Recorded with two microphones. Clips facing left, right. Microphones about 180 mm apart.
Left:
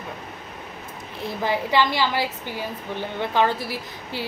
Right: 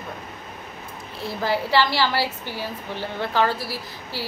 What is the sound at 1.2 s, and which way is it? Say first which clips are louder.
A woman's voice: even; 20° left (ahead or behind).